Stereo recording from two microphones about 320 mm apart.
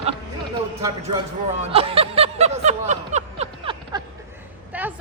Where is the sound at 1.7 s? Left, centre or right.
Centre.